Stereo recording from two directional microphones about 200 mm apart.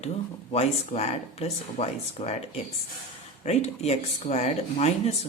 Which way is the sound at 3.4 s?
30° left (ahead or behind).